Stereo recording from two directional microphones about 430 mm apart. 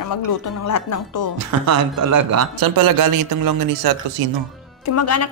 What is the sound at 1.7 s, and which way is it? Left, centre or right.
A man's voice, right.